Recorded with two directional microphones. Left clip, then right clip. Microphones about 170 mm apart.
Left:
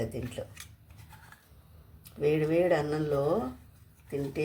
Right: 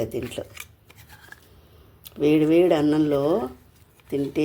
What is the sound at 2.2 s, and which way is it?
Speech, 55° right (ahead or behind).